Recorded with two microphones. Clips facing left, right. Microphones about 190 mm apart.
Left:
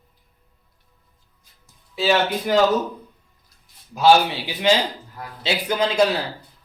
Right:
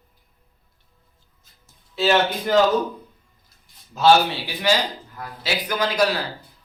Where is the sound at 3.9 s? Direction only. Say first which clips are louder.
Left 1 dB; 15° left (ahead or behind).